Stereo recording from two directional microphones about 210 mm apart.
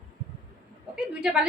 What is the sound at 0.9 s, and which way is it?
Speech, 5° right (ahead or behind).